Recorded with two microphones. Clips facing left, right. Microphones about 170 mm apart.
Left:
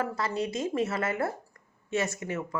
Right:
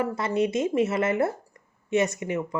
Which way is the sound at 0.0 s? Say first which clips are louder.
Right 5 dB; 20° right (ahead or behind).